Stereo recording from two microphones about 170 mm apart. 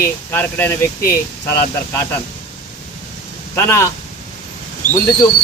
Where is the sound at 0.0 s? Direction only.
10° left (ahead or behind).